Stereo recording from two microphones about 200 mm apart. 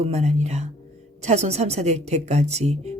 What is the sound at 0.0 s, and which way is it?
Speech, 30° right (ahead or behind).